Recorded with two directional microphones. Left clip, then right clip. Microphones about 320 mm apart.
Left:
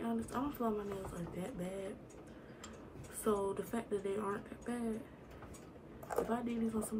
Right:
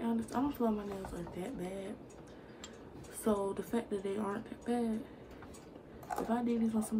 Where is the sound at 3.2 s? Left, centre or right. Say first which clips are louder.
Right 1 dB; centre.